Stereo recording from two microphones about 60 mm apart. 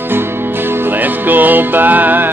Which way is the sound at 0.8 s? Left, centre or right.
Right.